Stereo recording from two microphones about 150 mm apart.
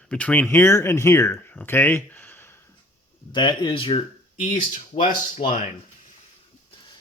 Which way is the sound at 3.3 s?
30° left (ahead or behind).